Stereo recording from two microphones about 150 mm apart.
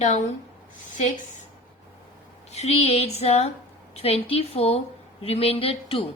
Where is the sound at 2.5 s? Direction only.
45° left (ahead or behind).